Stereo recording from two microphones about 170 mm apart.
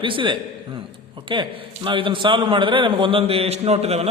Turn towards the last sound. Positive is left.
turn(degrees=-40)  # may be behind; listen again after turning